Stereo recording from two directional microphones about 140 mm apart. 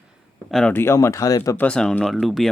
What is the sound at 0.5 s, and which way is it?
Speech, 10° left (ahead or behind).